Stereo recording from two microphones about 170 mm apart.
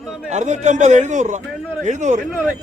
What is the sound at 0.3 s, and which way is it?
A man's voice, 45° right (ahead or behind).